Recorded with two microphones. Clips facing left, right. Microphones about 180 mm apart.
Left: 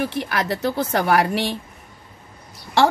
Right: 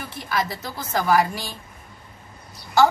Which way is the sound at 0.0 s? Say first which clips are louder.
Left 4 dB; 70° left (ahead or behind).